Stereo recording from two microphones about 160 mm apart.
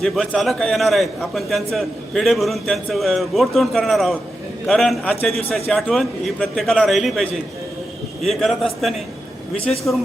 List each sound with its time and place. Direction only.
0.0 s a man's voice: centre (ahead or behind)